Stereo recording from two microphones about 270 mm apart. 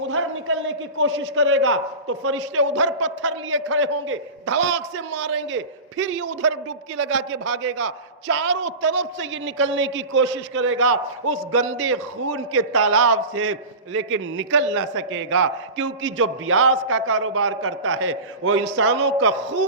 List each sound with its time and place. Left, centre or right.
0.0 s a man's voice: right
3.2 s a man's voice: right